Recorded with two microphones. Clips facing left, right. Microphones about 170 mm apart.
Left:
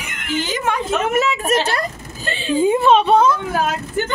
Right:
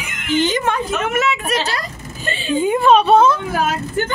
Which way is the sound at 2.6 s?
25° left (ahead or behind).